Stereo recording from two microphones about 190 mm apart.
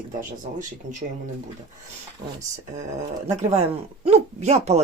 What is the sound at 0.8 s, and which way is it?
Speech, 40° right (ahead or behind).